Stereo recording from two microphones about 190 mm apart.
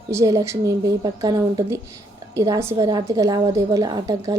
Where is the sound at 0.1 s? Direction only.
15° right (ahead or behind).